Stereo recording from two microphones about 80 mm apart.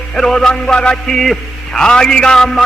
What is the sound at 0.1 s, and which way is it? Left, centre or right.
A man's voice, centre.